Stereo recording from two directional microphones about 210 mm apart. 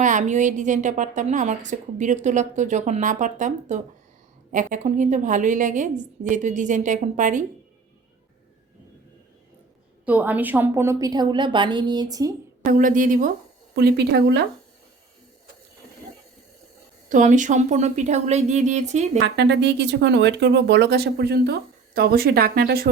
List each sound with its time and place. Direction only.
0.0 s a woman's voice: 35° right (ahead or behind)
10.1 s a woman's voice: 10° right (ahead or behind)
12.6 s a woman's voice: 40° right (ahead or behind)
13.7 s speech: 50° right (ahead or behind)
17.1 s a woman's voice: 35° right (ahead or behind)
19.2 s speech: 55° right (ahead or behind)